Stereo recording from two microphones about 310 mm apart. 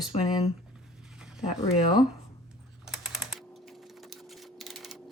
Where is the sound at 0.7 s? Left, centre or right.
Centre.